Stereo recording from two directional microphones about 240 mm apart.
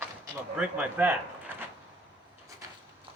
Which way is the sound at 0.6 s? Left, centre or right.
Centre.